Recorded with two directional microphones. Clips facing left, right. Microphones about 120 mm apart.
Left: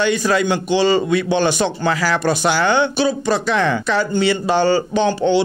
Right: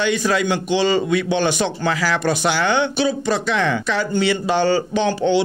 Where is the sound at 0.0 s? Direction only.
40° left (ahead or behind).